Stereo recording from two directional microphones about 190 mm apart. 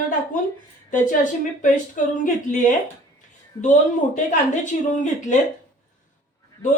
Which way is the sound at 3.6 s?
40° left (ahead or behind).